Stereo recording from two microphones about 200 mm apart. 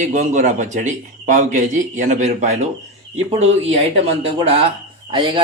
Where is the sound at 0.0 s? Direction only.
40° right (ahead or behind).